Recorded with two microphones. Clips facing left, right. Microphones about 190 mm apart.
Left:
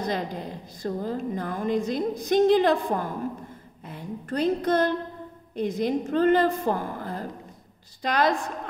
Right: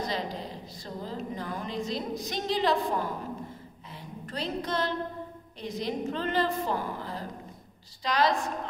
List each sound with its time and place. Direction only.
0.1 s a woman's voice: 55° left (ahead or behind)